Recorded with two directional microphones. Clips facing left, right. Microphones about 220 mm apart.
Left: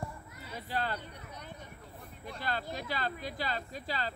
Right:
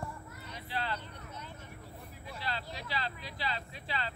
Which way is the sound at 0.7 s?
45° left (ahead or behind).